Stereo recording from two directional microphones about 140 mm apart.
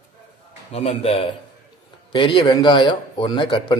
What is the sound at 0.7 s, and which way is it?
A man's voice, 45° left (ahead or behind).